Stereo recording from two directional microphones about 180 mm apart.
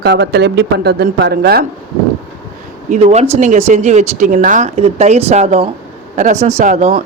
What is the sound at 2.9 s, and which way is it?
Speech, 40° right (ahead or behind).